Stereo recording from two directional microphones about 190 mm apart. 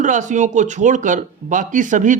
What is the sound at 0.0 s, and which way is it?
Speech, 40° right (ahead or behind).